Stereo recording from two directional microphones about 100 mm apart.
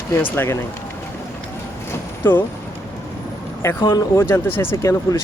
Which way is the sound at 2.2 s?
20° left (ahead or behind).